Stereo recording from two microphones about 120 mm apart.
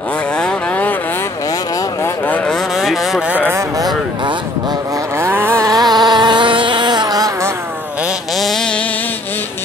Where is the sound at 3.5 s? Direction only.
25° right (ahead or behind).